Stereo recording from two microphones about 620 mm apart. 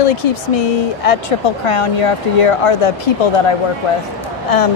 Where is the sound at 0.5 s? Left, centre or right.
Left.